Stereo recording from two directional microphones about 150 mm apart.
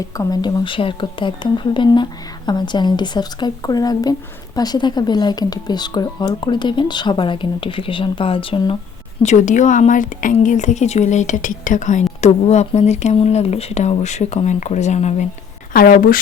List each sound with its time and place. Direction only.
0.2 s speech: 25° left (ahead or behind)
9.2 s a woman's voice: 50° left (ahead or behind)
15.7 s speech: 70° left (ahead or behind)